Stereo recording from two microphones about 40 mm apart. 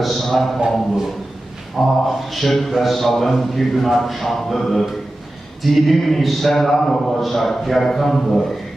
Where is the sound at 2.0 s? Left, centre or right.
Centre.